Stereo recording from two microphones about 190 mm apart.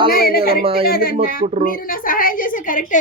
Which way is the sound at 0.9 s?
50° left (ahead or behind).